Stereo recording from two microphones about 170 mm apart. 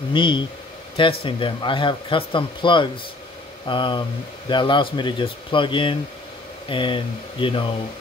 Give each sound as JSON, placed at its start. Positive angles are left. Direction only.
{"t": 0.1, "sound": "speech", "side_deg": 30}